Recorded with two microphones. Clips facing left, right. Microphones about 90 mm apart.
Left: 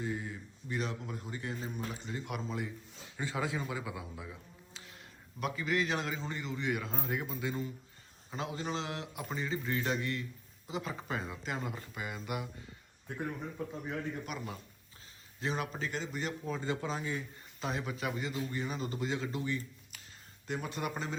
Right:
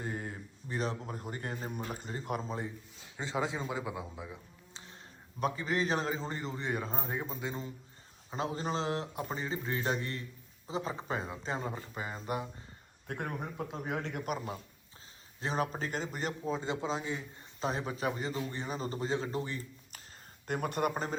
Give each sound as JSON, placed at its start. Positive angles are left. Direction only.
{"t": 0.0, "sound": "speech", "side_deg": -45}
{"t": 3.2, "sound": "a man's voice", "side_deg": -25}
{"t": 5.4, "sound": "speech", "side_deg": -35}
{"t": 13.1, "sound": "a man's voice", "side_deg": -55}
{"t": 13.7, "sound": "a man's voice", "side_deg": -75}
{"t": 14.3, "sound": "speech", "side_deg": -35}
{"t": 16.5, "sound": "a man's voice", "side_deg": -25}
{"t": 17.7, "sound": "speech", "side_deg": -35}
{"t": 20.5, "sound": "speech", "side_deg": -55}